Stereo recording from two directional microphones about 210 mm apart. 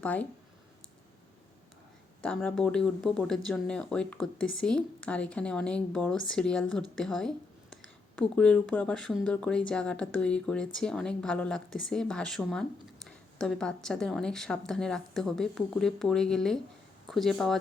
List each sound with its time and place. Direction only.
0.0 s speech: 5° left (ahead or behind)
2.2 s speech: 5° left (ahead or behind)